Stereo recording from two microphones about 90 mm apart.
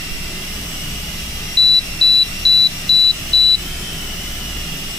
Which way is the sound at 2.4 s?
5° left (ahead or behind).